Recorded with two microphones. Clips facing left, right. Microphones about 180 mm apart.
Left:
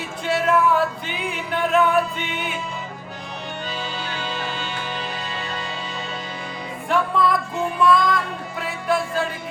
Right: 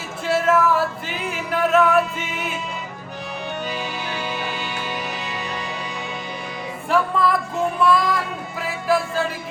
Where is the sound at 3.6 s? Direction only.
15° right (ahead or behind).